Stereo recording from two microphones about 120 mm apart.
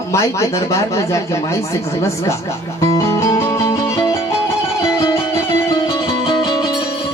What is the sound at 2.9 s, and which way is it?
Music, 25° left (ahead or behind).